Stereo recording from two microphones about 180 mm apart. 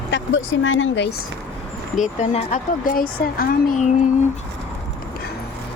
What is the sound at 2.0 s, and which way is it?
Speech, 40° left (ahead or behind).